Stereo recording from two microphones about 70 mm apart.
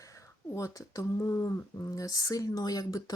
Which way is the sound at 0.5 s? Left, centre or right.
Left.